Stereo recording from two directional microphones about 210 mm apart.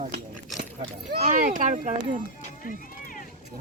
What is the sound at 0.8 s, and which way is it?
Speech, 35° right (ahead or behind).